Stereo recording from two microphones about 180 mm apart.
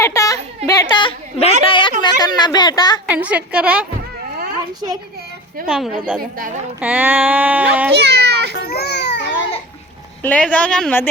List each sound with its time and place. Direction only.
0.0 s a sound: 20° left (ahead or behind)
2.0 s speech: 25° left (ahead or behind)
3.1 s speech: 10° right (ahead or behind)
5.6 s a woman's voice: 5° right (ahead or behind)
6.1 s speech: 50° right (ahead or behind)
6.7 s speech: 10° right (ahead or behind)
7.9 s a child's voice: 65° right (ahead or behind)
8.5 s a child's voice: 60° left (ahead or behind)
10.2 s a woman's voice: 10° left (ahead or behind)